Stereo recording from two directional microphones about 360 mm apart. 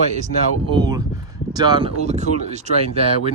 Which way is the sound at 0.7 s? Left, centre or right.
Centre.